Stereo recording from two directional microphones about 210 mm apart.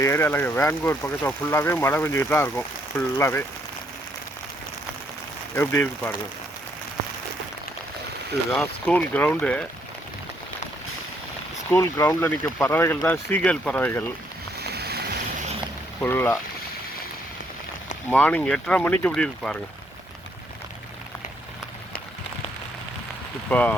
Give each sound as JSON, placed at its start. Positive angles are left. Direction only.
{"t": 0.0, "sound": "speech", "side_deg": 10}
{"t": 5.5, "sound": "speech", "side_deg": 10}
{"t": 8.5, "sound": "speech", "side_deg": 10}
{"t": 11.7, "sound": "speech", "side_deg": 15}
{"t": 14.6, "sound": "boat", "side_deg": -50}
{"t": 16.0, "sound": "speech", "side_deg": 10}
{"t": 18.1, "sound": "speech", "side_deg": 5}
{"t": 23.5, "sound": "speech", "side_deg": 5}